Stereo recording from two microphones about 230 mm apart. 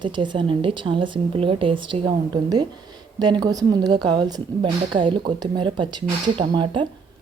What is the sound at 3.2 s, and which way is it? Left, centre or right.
Speech, centre.